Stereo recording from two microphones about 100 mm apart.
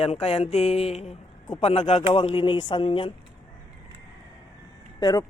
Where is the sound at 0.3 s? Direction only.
90° left.